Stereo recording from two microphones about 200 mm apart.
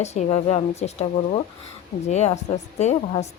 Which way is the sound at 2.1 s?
35° left (ahead or behind).